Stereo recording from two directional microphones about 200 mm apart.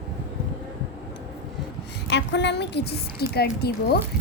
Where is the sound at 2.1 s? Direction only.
60° left (ahead or behind).